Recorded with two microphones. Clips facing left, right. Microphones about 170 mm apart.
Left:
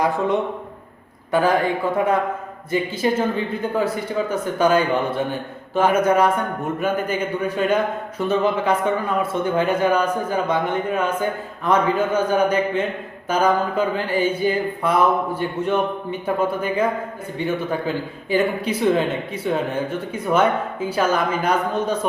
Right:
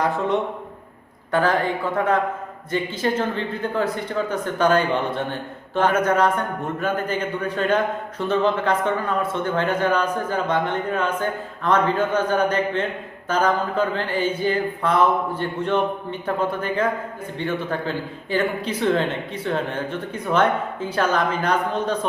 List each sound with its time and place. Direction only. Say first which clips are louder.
1.3 s speech: left 2 dB; 10° left (ahead or behind)